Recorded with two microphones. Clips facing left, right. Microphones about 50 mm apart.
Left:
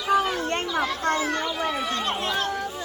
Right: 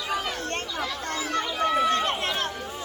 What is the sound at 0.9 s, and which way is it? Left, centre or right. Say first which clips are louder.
Children playing: left 5 dB; left.